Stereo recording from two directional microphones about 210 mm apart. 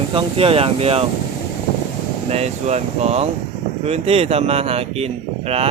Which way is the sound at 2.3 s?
30° right (ahead or behind).